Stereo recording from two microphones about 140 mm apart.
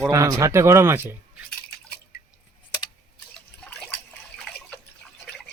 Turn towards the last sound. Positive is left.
turn(degrees=5)  # may be behind; listen again after turning